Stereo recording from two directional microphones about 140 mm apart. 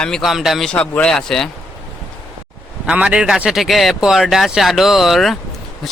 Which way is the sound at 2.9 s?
10° right (ahead or behind).